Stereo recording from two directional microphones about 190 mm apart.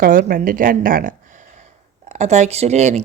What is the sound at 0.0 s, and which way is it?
A woman's voice, 45° right (ahead or behind).